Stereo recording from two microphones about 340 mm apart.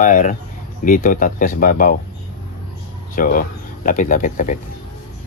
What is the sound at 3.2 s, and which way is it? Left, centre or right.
Speech, left.